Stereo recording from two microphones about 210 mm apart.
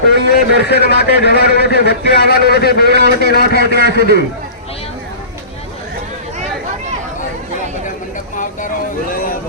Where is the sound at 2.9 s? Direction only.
55° right (ahead or behind).